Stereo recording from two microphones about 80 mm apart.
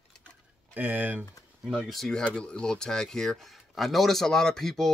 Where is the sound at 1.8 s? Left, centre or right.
Centre.